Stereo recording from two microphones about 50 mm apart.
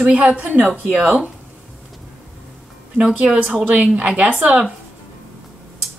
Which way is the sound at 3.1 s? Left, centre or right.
Right.